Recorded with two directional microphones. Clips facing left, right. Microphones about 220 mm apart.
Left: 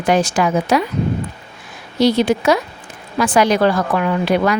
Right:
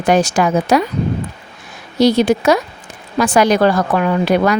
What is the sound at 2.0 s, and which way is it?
Speech, 40° right (ahead or behind).